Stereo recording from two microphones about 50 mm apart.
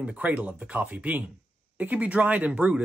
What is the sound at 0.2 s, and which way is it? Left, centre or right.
Speech, right.